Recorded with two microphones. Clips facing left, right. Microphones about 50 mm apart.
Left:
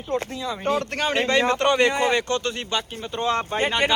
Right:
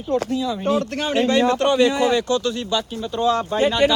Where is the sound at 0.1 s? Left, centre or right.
Left.